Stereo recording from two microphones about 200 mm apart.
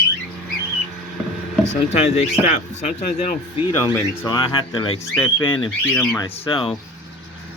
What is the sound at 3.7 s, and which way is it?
Speech, 25° left (ahead or behind).